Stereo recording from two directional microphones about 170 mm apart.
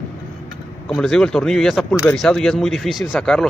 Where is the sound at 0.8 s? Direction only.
Centre (ahead or behind).